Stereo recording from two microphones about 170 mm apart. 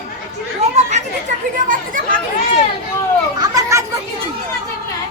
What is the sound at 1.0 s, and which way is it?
Chatter, 45° right (ahead or behind).